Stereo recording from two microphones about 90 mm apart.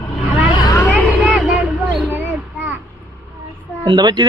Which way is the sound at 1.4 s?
5° right (ahead or behind).